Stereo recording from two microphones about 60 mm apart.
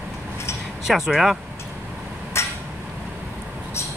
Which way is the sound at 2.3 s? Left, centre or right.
Left.